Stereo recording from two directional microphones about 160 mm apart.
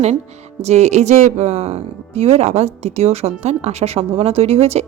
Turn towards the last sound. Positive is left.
turn(degrees=-40)  # may be behind; listen again after turning